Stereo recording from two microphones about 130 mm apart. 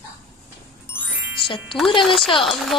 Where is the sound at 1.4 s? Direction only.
40° left (ahead or behind).